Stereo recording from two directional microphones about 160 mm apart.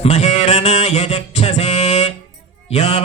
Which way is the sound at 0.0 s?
40° left (ahead or behind).